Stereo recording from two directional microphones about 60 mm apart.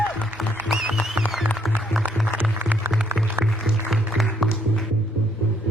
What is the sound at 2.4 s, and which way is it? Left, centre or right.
Music, right.